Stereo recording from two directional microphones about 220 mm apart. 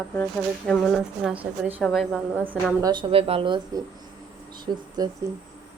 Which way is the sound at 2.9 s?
25° right (ahead or behind).